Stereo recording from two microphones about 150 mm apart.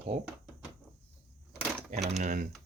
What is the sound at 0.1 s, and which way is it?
Speech, 50° right (ahead or behind).